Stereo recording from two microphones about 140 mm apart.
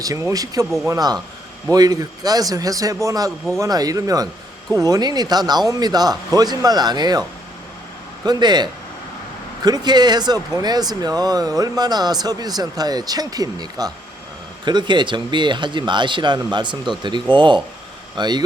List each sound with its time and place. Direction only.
0.0 s speech: 20° right (ahead or behind)